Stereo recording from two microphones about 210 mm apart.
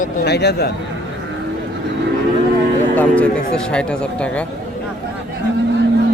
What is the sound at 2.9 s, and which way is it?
Music, 5° left (ahead or behind).